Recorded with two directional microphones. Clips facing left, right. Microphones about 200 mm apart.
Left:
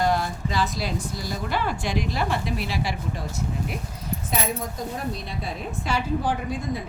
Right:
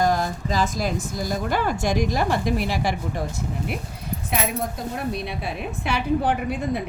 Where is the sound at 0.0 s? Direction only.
45° right (ahead or behind).